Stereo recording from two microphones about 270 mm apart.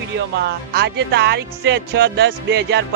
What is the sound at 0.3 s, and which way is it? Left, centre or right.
Speech, right.